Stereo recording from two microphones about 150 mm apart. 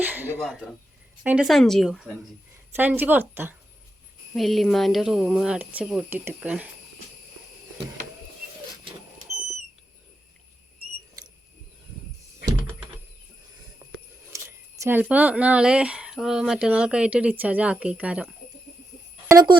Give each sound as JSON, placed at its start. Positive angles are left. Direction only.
{"t": 0.0, "sound": "speech", "side_deg": -10}
{"t": 0.3, "sound": "speech", "side_deg": 5}
{"t": 1.2, "sound": "speech", "side_deg": -10}
{"t": 2.7, "sound": "speech", "side_deg": -15}
{"t": 4.4, "sound": "speech", "side_deg": 0}
{"t": 14.3, "sound": "a sound", "side_deg": -15}
{"t": 15.0, "sound": "speech", "side_deg": -10}
{"t": 19.3, "sound": "speech", "side_deg": -25}